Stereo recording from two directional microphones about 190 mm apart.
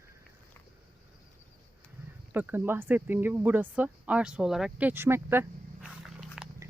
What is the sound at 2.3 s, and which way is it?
Speech, 10° right (ahead or behind).